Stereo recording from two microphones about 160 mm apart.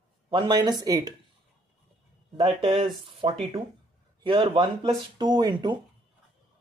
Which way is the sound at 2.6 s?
35° right (ahead or behind).